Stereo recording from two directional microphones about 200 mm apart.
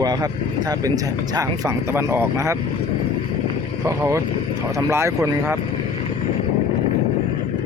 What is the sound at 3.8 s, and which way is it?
Speech, 15° right (ahead or behind).